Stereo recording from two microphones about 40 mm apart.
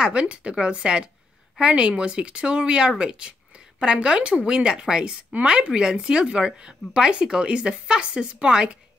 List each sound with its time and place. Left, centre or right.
0.0 s speech: right